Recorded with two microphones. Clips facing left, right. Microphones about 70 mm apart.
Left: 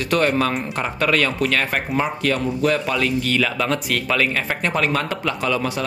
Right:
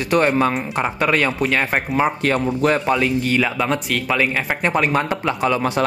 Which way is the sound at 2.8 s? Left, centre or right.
Right.